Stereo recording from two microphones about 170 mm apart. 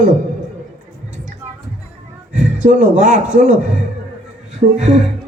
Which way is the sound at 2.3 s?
50° right (ahead or behind).